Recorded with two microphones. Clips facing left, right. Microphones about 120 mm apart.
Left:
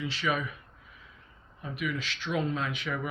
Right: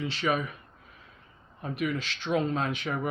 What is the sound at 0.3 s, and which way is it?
Speech, 45° right (ahead or behind).